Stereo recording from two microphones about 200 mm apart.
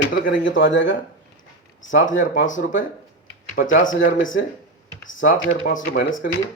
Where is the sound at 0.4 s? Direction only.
70° left (ahead or behind).